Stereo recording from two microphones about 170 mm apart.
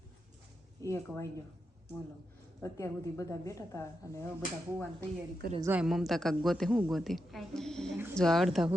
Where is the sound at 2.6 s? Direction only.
20° left (ahead or behind).